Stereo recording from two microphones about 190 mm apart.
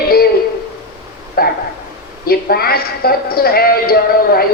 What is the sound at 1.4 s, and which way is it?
A woman's voice, 55° left (ahead or behind).